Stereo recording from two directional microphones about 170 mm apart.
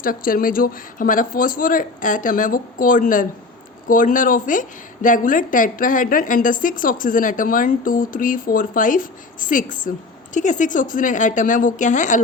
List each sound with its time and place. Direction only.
0.0 s a woman's voice: 55° left (ahead or behind)